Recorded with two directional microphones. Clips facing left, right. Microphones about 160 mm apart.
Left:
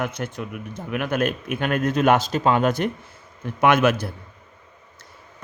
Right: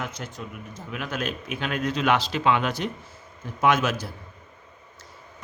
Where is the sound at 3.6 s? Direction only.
60° left (ahead or behind).